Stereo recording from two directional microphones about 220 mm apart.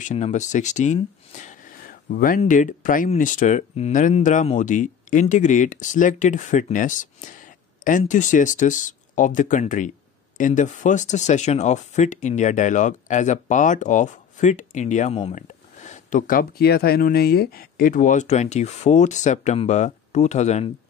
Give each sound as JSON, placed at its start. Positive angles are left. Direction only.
{"t": 0.0, "sound": "speech", "side_deg": 30}